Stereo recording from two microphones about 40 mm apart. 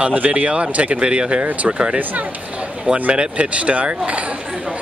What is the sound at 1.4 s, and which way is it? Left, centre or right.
Speech, right.